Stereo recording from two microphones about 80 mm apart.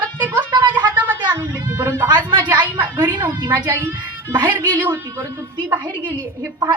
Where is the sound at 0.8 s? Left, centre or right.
Right.